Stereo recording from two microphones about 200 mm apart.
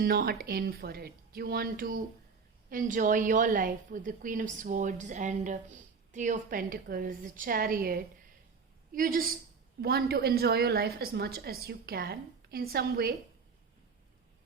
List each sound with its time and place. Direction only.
0.0 s a woman's voice: 50° right (ahead or behind)